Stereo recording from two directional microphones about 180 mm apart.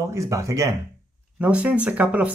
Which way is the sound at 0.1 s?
15° right (ahead or behind).